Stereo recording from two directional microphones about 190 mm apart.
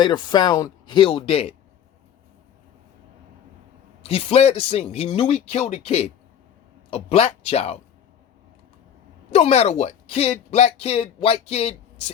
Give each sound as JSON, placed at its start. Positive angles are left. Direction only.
{"t": 0.0, "sound": "speech", "side_deg": 20}
{"t": 4.1, "sound": "speech", "side_deg": 30}
{"t": 9.3, "sound": "speech", "side_deg": 35}